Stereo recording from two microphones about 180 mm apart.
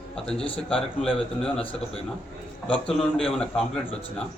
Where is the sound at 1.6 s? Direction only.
30° left (ahead or behind).